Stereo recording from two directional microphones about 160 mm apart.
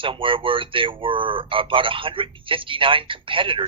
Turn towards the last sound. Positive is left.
turn(degrees=-30)  # may be behind; listen again after turning